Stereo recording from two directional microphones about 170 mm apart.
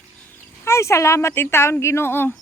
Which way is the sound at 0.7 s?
15° left (ahead or behind).